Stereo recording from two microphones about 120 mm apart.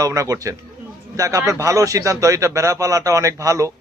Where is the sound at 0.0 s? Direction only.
25° right (ahead or behind).